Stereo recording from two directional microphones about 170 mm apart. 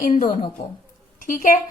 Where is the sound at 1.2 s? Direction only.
50° left (ahead or behind).